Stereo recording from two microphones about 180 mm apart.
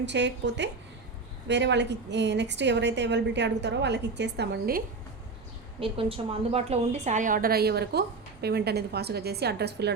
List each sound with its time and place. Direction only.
0.0 s a woman's voice: 75° right (ahead or behind)
5.8 s a woman's voice: 30° right (ahead or behind); by 9.9 s 65° right (ahead or behind)